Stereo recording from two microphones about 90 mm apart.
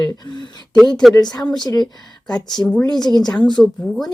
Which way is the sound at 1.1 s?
50° left (ahead or behind).